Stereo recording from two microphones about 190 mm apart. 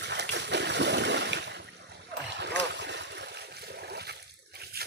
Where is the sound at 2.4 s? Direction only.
65° right (ahead or behind).